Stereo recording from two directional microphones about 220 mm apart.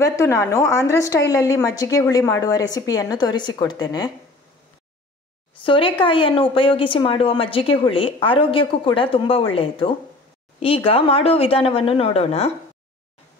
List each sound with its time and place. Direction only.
0.0 s a woman's voice: 10° left (ahead or behind)
5.6 s a woman's voice: 25° left (ahead or behind)